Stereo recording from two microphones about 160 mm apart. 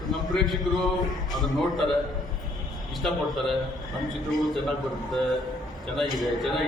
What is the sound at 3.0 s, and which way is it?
Speech, centre (ahead or behind).